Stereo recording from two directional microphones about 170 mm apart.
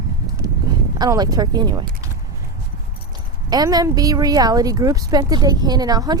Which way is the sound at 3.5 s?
25° right (ahead or behind).